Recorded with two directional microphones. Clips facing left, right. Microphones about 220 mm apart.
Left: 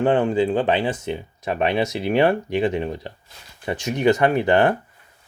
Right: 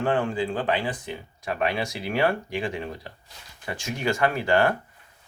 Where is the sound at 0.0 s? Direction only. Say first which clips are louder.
Left 6 dB; 20° left (ahead or behind).